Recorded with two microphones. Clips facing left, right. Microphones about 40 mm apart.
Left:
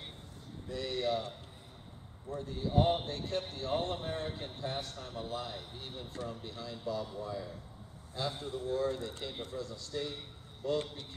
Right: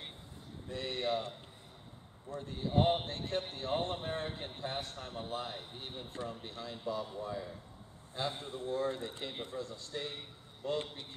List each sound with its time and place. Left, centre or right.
0.7 s a man's voice: right
2.4 s a man's voice: right